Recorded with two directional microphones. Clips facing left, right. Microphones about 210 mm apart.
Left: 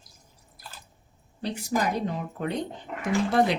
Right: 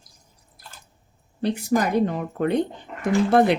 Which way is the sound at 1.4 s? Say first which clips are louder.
Right 6 dB; 60° right (ahead or behind).